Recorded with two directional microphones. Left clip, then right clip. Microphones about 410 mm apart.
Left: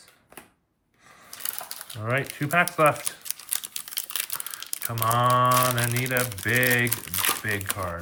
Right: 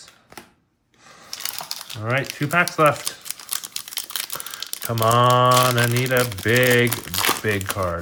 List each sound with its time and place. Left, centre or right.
1.3 s coin: centre
2.0 s speech: centre
3.9 s crumpling: centre